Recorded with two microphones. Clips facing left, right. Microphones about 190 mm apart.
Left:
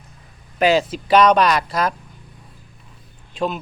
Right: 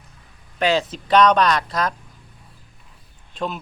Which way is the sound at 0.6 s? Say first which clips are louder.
Left 4 dB; 10° left (ahead or behind).